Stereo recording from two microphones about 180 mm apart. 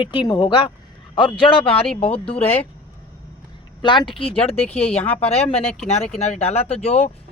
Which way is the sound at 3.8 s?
25° left (ahead or behind).